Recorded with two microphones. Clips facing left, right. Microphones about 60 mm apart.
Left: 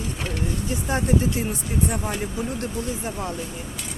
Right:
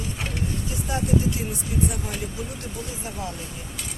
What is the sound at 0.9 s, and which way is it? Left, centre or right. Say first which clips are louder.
Speech: left 2 dB; left.